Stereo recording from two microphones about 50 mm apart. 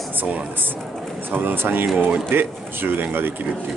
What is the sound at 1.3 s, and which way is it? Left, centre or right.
Speech, right.